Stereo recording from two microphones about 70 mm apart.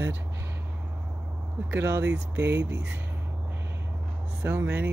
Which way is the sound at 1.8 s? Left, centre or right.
Right.